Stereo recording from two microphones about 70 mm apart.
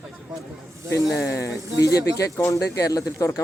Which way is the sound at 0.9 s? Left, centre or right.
Left.